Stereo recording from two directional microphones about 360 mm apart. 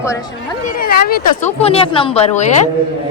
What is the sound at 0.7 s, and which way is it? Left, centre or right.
A woman's voice, left.